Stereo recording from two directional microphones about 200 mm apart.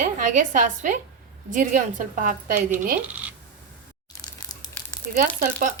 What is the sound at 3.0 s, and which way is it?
Speech, 5° right (ahead or behind).